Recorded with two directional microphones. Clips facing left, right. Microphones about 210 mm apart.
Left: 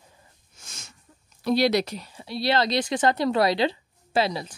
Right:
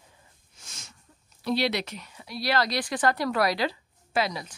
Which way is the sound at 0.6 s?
45° left (ahead or behind).